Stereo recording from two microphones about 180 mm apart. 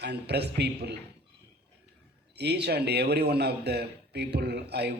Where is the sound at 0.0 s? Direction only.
65° right (ahead or behind).